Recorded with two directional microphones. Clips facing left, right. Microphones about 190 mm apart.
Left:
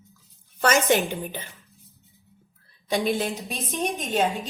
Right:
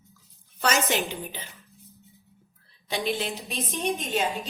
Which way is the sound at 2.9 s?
45° left (ahead or behind).